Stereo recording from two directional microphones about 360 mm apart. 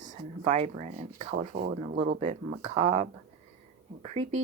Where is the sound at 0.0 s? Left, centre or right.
Centre.